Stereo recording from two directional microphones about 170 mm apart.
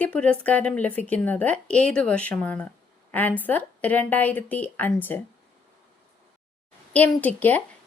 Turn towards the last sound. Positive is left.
turn(degrees=10)  # may be behind; listen again after turning